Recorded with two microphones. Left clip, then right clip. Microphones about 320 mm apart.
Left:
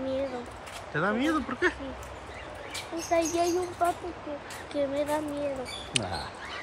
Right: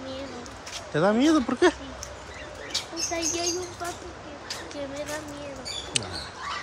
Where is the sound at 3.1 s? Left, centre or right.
Centre.